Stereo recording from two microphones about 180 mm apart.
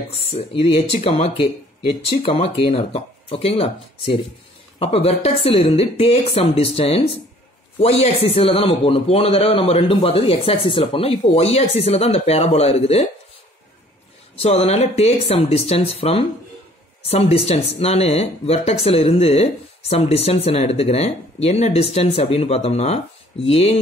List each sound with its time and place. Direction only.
0.1 s speech: 30° left (ahead or behind)
14.3 s speech: 35° left (ahead or behind)